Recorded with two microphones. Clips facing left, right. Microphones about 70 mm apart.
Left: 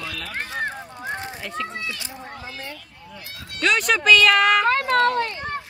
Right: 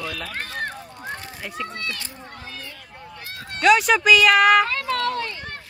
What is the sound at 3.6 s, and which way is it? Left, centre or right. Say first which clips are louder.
Speech: right 4 dB; centre.